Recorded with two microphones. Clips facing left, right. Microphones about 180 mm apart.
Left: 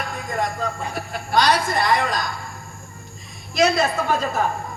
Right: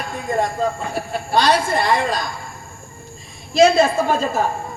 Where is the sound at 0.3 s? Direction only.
30° right (ahead or behind).